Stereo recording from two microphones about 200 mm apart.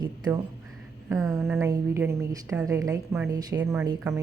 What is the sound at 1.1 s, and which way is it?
Speech, 15° right (ahead or behind).